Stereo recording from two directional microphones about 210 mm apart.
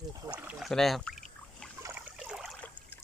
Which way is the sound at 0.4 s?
Centre (ahead or behind).